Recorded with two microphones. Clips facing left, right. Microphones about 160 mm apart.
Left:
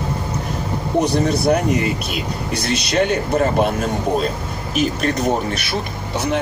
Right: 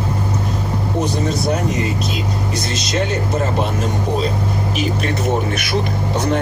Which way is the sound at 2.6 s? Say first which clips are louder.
Left 6 dB; 60° left (ahead or behind).